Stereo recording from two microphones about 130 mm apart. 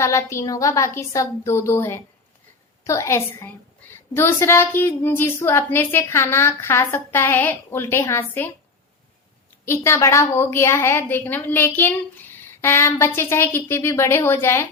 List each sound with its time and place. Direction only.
0.0 s a woman's voice: 20° left (ahead or behind)
9.6 s a woman's voice: 20° left (ahead or behind)